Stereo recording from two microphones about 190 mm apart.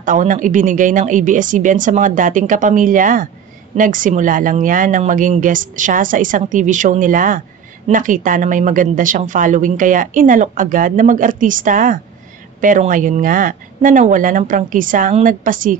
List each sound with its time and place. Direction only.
0.0 s speech: 40° right (ahead or behind)